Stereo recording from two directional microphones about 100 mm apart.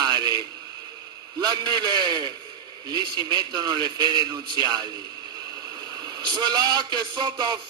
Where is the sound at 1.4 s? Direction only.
45° right (ahead or behind).